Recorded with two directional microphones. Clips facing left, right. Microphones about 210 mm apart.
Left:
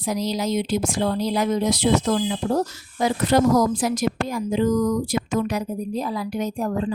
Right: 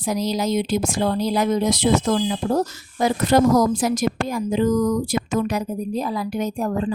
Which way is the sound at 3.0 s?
45° right (ahead or behind).